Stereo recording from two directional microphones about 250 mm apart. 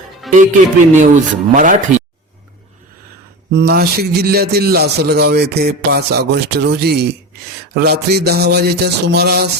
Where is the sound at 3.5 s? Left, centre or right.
Right.